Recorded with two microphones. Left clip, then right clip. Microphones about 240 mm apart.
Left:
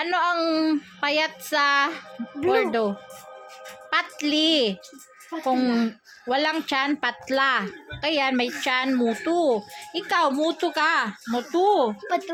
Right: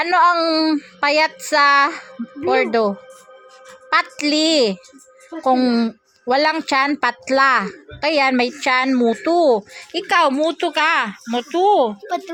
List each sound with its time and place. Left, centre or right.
0.0 s speech: right